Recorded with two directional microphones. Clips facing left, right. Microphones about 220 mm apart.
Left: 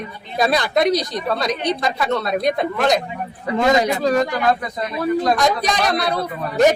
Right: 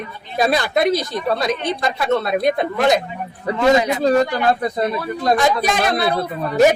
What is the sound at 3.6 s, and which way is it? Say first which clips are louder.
Speech: right 1 dB; 40° left (ahead or behind).